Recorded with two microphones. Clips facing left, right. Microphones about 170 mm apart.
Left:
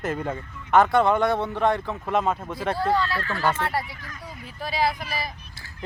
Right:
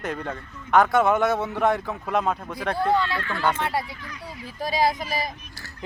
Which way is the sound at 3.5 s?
20° right (ahead or behind).